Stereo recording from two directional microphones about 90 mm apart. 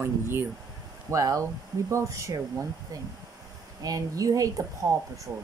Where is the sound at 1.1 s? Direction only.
35° right (ahead or behind).